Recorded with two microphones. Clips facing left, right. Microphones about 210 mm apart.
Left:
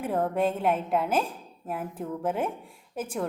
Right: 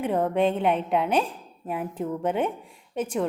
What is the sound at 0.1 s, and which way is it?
A woman's voice, centre (ahead or behind).